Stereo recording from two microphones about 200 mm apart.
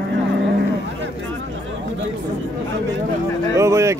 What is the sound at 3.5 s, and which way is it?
Speech, 15° right (ahead or behind).